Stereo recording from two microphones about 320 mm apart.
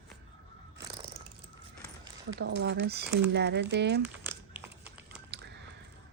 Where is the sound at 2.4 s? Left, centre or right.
Right.